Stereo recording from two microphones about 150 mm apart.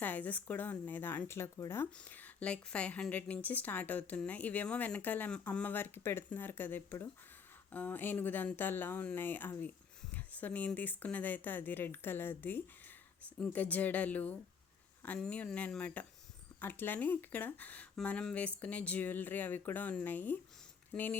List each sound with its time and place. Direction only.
0.0 s speech: 10° left (ahead or behind)